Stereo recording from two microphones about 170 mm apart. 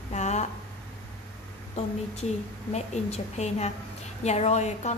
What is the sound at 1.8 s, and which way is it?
A woman's voice, 40° left (ahead or behind).